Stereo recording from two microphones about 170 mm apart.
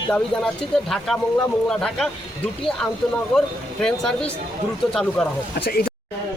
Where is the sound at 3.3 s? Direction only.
5° left (ahead or behind).